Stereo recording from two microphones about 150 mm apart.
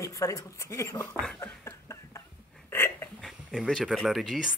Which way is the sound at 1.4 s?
15° left (ahead or behind).